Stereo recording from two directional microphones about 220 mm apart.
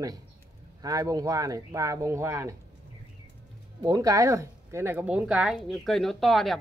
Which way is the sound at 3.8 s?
15° right (ahead or behind).